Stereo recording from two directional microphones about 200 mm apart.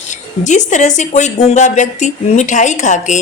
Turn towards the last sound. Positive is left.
turn(degrees=35)  # may be behind; listen again after turning